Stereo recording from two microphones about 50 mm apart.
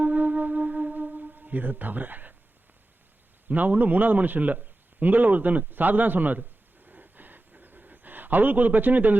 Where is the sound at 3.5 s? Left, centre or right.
Right.